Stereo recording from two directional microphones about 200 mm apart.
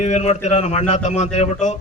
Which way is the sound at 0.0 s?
35° left (ahead or behind).